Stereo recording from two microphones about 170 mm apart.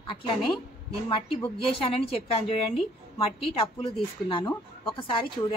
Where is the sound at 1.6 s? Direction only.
35° left (ahead or behind).